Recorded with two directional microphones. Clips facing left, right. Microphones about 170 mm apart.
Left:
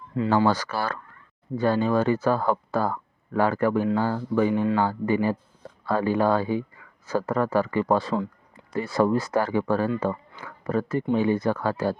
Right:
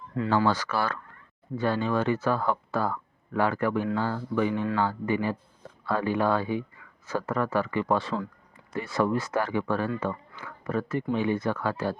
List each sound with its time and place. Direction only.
0.4 s speech: 40° left (ahead or behind)